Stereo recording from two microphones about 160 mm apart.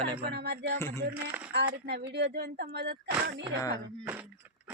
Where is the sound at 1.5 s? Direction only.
90° right.